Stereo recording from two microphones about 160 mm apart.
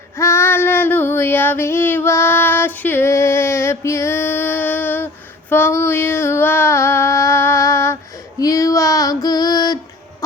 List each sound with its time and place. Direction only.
0.2 s female singing: 15° left (ahead or behind)
5.5 s a sound: 15° left (ahead or behind)
8.4 s female singing: 20° left (ahead or behind)